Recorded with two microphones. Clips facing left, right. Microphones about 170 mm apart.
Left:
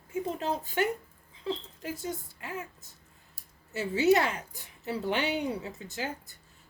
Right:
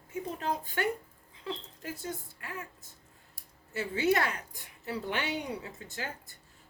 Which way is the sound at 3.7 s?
20° left (ahead or behind).